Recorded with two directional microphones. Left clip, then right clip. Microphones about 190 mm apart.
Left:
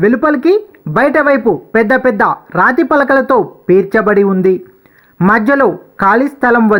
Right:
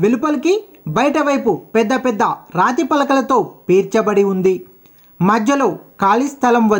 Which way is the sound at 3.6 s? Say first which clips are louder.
Left 5 dB; 10° left (ahead or behind).